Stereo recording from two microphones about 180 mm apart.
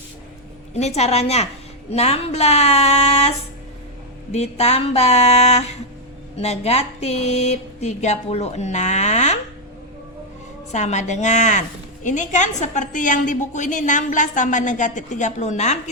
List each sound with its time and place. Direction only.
0.8 s speech: 35° left (ahead or behind)
10.7 s a woman's voice: 40° left (ahead or behind)